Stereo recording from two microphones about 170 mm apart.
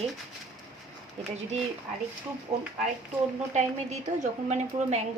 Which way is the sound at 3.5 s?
40° right (ahead or behind).